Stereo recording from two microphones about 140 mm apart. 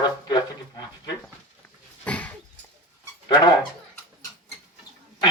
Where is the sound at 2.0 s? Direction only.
10° left (ahead or behind).